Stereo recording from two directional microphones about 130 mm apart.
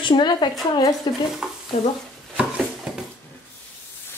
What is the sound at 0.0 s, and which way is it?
A woman's voice, 35° left (ahead or behind).